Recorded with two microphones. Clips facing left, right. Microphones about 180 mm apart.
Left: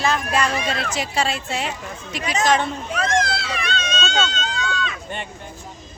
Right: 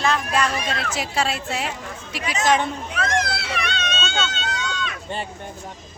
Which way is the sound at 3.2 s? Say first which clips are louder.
Left 1 dB; 60° right (ahead or behind).